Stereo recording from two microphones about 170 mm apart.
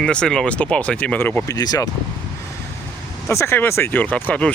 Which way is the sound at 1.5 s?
20° left (ahead or behind).